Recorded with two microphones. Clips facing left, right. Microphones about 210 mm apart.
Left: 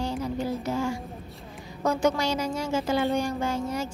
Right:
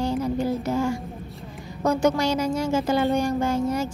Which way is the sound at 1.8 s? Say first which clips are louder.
Right 3 dB; 45° right (ahead or behind).